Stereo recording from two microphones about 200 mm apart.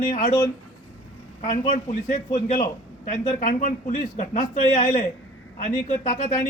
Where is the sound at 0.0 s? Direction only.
40° left (ahead or behind).